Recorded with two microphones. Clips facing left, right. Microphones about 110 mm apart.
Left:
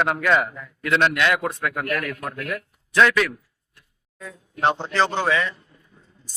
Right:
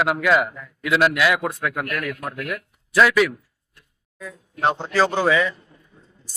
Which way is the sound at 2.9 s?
5° right (ahead or behind).